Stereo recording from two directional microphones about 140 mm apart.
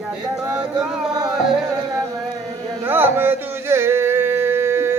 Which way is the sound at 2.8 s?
15° right (ahead or behind).